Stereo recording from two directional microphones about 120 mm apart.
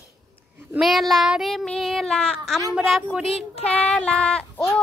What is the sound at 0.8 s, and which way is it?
Child singing, centre (ahead or behind).